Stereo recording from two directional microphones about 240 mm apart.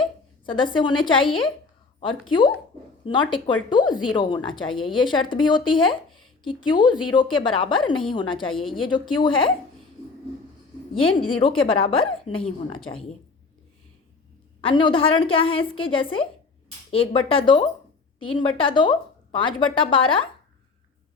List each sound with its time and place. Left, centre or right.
0.4 s speech: centre
6.1 s a sound: centre
6.4 s speech: centre
10.9 s speech: left
14.6 s speech: left